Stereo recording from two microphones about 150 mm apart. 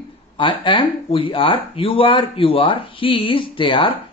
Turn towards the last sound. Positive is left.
turn(degrees=35)  # may be behind; listen again after turning